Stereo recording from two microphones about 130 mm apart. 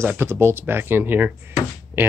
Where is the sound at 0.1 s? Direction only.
20° right (ahead or behind).